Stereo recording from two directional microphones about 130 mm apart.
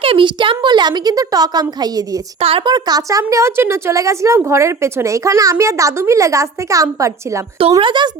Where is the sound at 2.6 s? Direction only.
30° right (ahead or behind).